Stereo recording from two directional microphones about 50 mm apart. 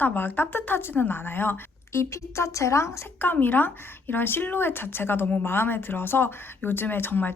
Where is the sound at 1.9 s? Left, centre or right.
Left.